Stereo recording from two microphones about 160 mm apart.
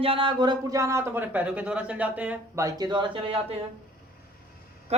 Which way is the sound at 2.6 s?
25° right (ahead or behind).